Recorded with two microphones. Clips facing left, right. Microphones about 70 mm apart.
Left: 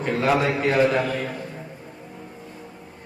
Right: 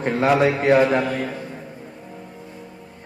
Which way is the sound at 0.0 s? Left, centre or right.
Right.